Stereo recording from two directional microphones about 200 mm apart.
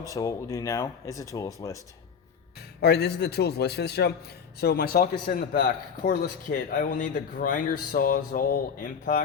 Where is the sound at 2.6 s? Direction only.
55° left (ahead or behind).